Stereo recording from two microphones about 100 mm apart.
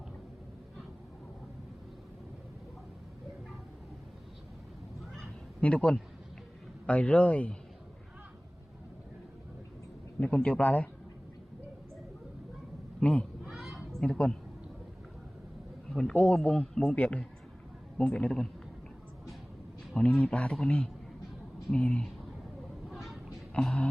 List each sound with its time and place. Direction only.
5.5 s a man's voice: 10° left (ahead or behind)
10.2 s speech: 10° left (ahead or behind)
13.0 s speech: 10° left (ahead or behind)
13.4 s honk: 5° right (ahead or behind)
14.0 s speech: 10° left (ahead or behind)
15.9 s speech: 5° left (ahead or behind)
20.0 s speech: 10° left (ahead or behind)
22.9 s a sound: centre (ahead or behind)